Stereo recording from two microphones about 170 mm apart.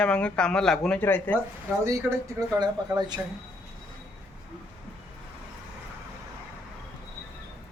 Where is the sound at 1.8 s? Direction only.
20° right (ahead or behind).